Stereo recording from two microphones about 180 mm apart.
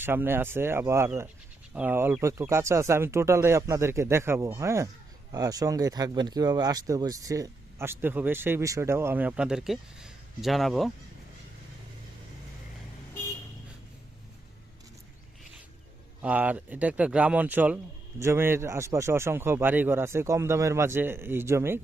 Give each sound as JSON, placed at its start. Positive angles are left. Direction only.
{"t": 0.0, "sound": "speech", "side_deg": -10}
{"t": 16.2, "sound": "speech", "side_deg": -10}